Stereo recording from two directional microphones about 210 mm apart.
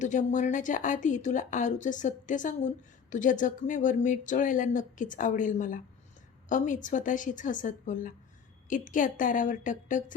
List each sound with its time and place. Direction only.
0.0 s speech: 35° left (ahead or behind)